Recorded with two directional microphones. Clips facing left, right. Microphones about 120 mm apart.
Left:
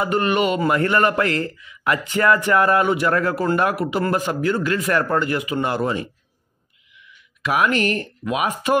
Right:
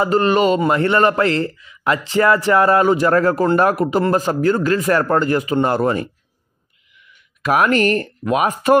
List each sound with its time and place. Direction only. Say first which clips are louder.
0.0 s a man's voice: right 4 dB; 30° right (ahead or behind); by 8.7 s 45° right (ahead or behind)